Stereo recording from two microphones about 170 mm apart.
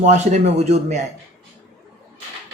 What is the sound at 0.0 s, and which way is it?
Speech, 45° right (ahead or behind).